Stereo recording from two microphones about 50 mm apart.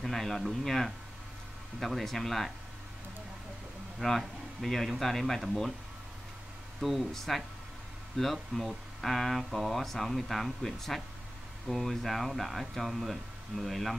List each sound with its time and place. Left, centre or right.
0.0 s speech: centre
4.0 s speech: centre
6.8 s speech: centre